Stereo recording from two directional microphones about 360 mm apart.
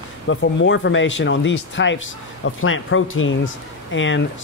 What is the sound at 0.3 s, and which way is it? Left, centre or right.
Speech, left.